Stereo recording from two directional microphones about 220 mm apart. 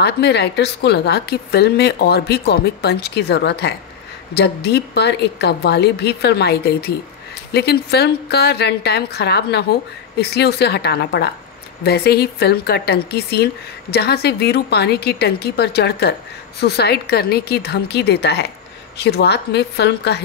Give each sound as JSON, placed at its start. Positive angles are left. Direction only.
{"t": 0.0, "sound": "speech", "side_deg": 50}